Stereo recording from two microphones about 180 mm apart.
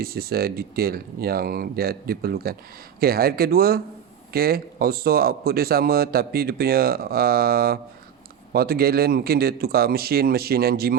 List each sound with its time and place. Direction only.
0.0 s speech: 60° right (ahead or behind)